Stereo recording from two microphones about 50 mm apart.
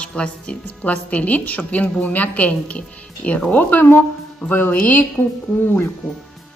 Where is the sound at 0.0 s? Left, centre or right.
Centre; by 4.7 s left.